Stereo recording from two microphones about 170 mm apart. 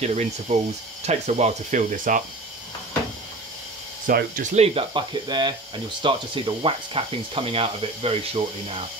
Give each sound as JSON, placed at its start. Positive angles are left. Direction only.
{"t": 0.0, "sound": "speech", "side_deg": -40}
{"t": 4.1, "sound": "speech", "side_deg": -50}
{"t": 4.7, "sound": "speech", "side_deg": -25}